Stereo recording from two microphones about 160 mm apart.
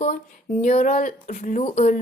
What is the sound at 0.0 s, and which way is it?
A woman's voice, 50° left (ahead or behind).